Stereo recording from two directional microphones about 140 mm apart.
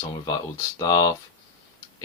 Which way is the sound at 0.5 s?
25° left (ahead or behind).